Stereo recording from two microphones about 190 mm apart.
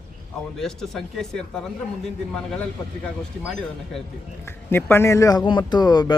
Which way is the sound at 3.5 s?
5° left (ahead or behind).